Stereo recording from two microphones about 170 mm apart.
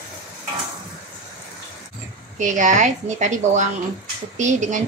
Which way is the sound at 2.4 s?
45° right (ahead or behind).